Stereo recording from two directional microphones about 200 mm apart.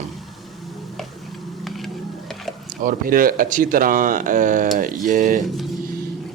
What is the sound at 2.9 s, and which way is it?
Speech, 45° right (ahead or behind).